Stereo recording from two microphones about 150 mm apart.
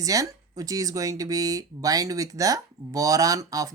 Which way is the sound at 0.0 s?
25° right (ahead or behind).